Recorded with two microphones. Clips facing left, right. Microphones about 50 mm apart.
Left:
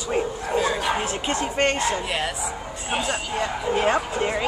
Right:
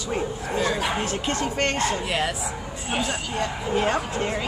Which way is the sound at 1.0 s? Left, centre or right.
Centre.